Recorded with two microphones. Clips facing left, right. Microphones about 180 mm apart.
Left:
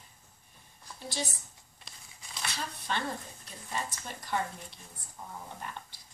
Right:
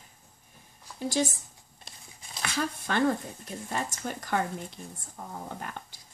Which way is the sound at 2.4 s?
50° right (ahead or behind).